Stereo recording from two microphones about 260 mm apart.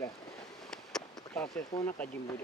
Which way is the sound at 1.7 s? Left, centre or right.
Centre.